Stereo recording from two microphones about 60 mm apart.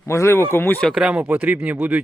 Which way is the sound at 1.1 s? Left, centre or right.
Right.